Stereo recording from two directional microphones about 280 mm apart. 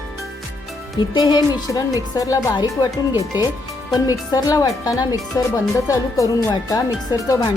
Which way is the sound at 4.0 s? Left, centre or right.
Centre.